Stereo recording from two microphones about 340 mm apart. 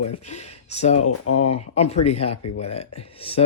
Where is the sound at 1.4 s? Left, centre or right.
Centre.